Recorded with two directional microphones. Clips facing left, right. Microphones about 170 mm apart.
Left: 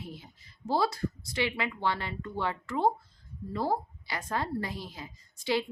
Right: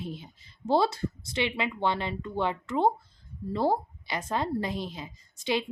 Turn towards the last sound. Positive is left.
turn(degrees=-20)  # may be behind; listen again after turning